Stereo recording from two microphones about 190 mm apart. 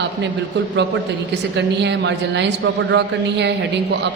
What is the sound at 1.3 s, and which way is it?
A woman's voice, 65° right (ahead or behind).